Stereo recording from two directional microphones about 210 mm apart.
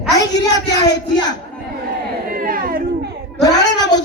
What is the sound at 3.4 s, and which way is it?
Speech, 20° left (ahead or behind).